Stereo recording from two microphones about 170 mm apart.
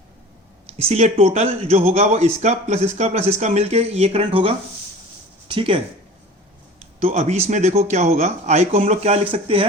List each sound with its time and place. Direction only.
0.8 s speech: 40° right (ahead or behind)
7.0 s speech: 40° right (ahead or behind)